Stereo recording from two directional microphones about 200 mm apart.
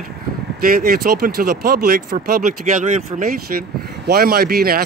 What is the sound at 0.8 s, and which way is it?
Speech, 45° right (ahead or behind).